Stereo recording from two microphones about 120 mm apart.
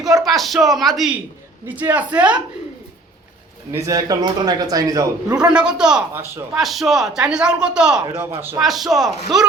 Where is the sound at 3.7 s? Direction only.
25° right (ahead or behind).